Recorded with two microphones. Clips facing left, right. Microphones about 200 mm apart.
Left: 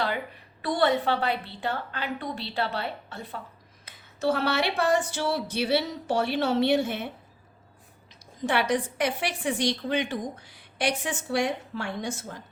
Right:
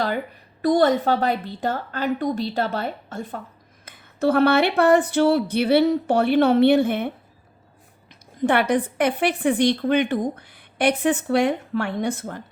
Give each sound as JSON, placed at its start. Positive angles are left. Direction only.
{"t": 0.6, "sound": "a woman's voice", "side_deg": -40}
{"t": 3.8, "sound": "a woman's voice", "side_deg": -55}
{"t": 8.4, "sound": "a woman's voice", "side_deg": -55}